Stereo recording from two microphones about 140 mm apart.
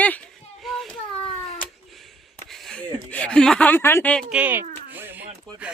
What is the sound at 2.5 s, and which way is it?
Speech, 5° left (ahead or behind).